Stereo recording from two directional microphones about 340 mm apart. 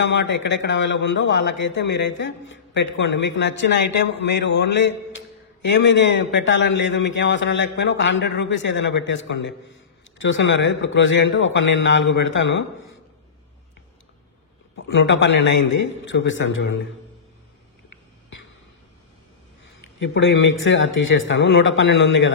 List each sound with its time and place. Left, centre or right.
0.0 s a man's voice: left
14.8 s a man's voice: left
20.0 s a man's voice: left